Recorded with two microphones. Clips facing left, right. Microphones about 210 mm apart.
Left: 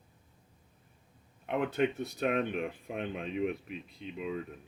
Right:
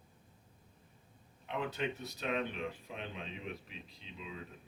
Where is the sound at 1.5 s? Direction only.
55° left (ahead or behind).